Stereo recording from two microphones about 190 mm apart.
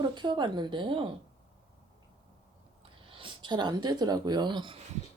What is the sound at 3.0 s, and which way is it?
Speech, 25° right (ahead or behind).